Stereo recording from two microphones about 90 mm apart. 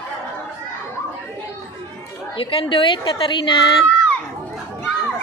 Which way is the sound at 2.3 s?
80° left.